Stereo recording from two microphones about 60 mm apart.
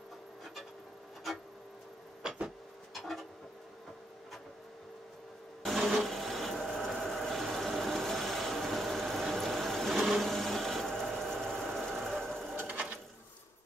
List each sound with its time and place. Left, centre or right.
2.4 s vehicle: centre
5.9 s wood: centre
12.1 s sewing machine: centre
12.5 s sewing machine: right